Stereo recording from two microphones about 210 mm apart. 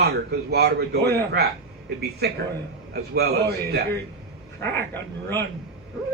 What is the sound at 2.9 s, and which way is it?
A man's voice, 50° right (ahead or behind).